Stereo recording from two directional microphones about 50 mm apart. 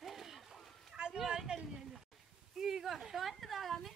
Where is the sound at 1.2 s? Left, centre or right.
Centre.